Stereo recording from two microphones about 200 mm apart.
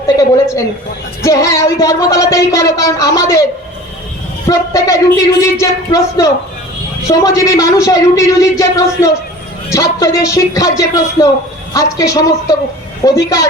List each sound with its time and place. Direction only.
0.2 s a woman's voice: 15° left (ahead or behind)
4.4 s speech: 15° left (ahead or behind)